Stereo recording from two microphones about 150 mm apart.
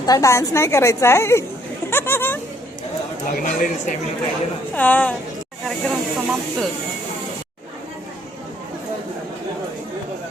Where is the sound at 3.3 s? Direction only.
60° left (ahead or behind).